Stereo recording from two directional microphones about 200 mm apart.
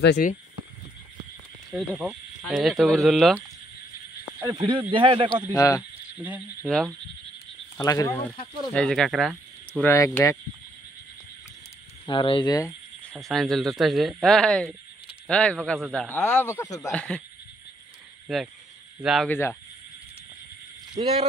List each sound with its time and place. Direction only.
0.0 s speech: 55° left (ahead or behind)
1.7 s speech: centre (ahead or behind)
4.6 s speech: 25° right (ahead or behind)
5.5 s speech: 15° left (ahead or behind)
5.8 s speech: 5° right (ahead or behind)
7.7 s speech: 15° left (ahead or behind)
8.7 s speech: 5° left (ahead or behind)
9.9 s speech: 15° left (ahead or behind)
12.1 s speech: 25° left (ahead or behind)
13.1 s speech: centre (ahead or behind)
18.3 s speech: centre (ahead or behind)
19.2 s speech: 10° left (ahead or behind)
21.0 s speech: 30° right (ahead or behind)